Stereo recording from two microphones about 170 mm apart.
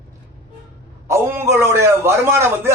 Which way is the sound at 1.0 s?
15° right (ahead or behind).